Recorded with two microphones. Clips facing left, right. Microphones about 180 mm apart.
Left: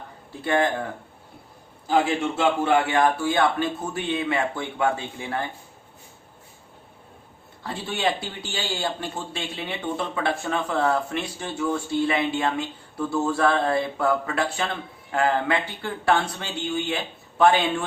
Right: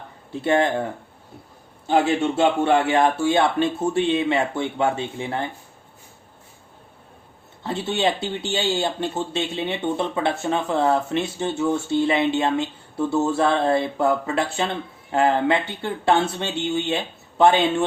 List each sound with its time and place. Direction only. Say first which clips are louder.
0.4 s a man's voice: right 3 dB; 25° right (ahead or behind)
2.0 s a man's voice: right 3 dB; 25° right (ahead or behind)
7.6 s a man's voice: right 4 dB; 25° right (ahead or behind)